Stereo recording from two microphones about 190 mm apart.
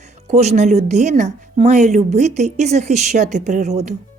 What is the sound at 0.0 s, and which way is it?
Speech, 35° right (ahead or behind).